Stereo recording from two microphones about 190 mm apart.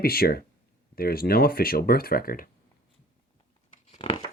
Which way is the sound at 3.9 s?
30° left (ahead or behind).